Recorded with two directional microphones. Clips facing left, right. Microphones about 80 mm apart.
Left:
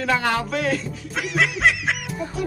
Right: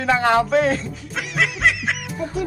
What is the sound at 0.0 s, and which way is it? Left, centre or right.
Speech, right.